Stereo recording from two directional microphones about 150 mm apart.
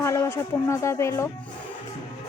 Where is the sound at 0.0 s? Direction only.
20° left (ahead or behind).